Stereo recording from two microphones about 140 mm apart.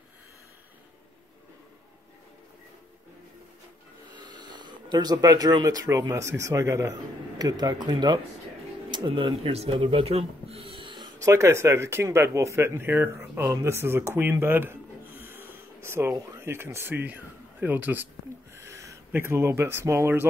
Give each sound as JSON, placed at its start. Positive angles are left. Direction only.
{"t": 4.1, "sound": "speech", "side_deg": -30}
{"t": 11.2, "sound": "speech", "side_deg": -20}